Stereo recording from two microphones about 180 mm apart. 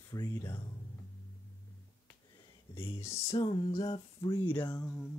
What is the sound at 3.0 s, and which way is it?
Humming, 15° left (ahead or behind).